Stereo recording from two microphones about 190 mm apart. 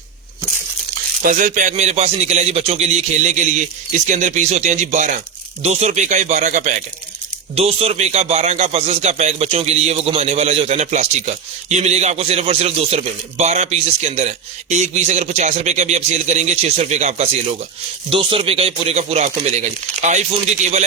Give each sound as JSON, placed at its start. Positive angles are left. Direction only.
{"t": 1.2, "sound": "a man's voice", "side_deg": -45}